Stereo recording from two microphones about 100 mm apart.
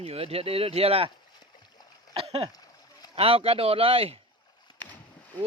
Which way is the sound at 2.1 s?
80° right.